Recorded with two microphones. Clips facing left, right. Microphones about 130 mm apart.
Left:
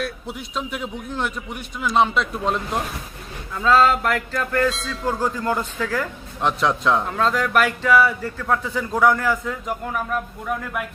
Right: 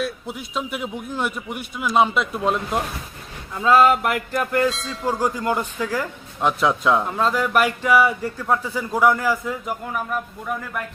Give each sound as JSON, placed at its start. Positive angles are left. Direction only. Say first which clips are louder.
{"t": 0.0, "sound": "a man's voice", "louder": "right 1 dB", "side_deg": 0}
{"t": 3.5, "sound": "a man's voice", "louder": "right 1 dB", "side_deg": -15}
{"t": 4.7, "sound": "a man's voice", "louder": "left 1 dB", "side_deg": 0}
{"t": 5.0, "sound": "a man's voice", "louder": "right 1 dB", "side_deg": -10}